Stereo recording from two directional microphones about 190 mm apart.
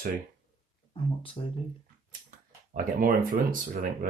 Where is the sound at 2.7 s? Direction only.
50° right (ahead or behind).